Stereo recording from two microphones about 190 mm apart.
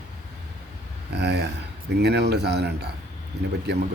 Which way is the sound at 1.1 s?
60° right (ahead or behind).